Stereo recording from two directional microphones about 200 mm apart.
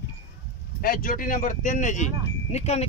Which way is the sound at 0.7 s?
45° left (ahead or behind).